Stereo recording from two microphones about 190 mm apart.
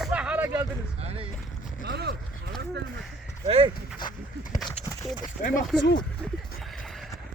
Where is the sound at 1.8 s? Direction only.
60° right (ahead or behind).